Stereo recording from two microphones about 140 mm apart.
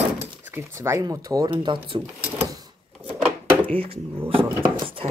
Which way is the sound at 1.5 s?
40° right (ahead or behind).